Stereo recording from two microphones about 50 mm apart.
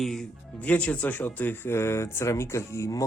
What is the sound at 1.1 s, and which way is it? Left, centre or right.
Speech, left.